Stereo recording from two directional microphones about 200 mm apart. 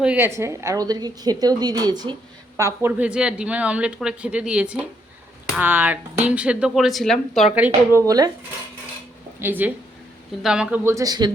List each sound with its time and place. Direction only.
0.0 s a woman's voice: 10° right (ahead or behind)
7.9 s a man's voice: 20° right (ahead or behind)
9.4 s a man's voice: 10° right (ahead or behind)